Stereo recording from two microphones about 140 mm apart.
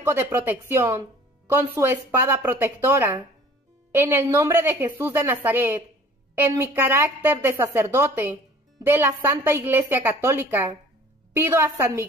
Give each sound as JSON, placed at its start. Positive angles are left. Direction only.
{"t": 0.0, "sound": "a woman's voice", "side_deg": -15}